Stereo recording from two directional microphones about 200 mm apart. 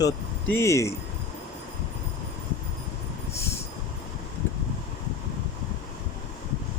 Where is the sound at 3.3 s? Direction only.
15° left (ahead or behind).